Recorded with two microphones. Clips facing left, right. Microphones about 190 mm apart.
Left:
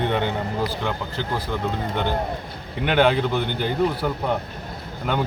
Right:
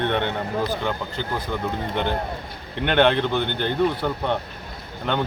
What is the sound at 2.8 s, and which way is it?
A man's voice, 5° left (ahead or behind).